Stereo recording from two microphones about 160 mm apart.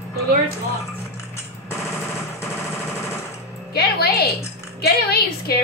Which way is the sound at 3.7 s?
85° left.